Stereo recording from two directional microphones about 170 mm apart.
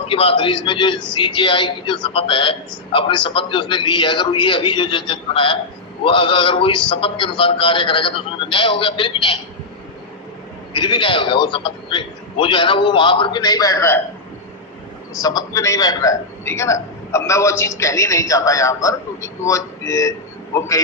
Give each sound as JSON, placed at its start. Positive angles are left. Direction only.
{"t": 0.1, "sound": "a man's voice", "side_deg": 30}
{"t": 10.8, "sound": "a man's voice", "side_deg": 25}
{"t": 15.2, "sound": "a man's voice", "side_deg": 20}